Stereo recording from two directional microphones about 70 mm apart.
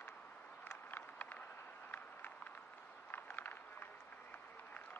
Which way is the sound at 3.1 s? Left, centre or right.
Left.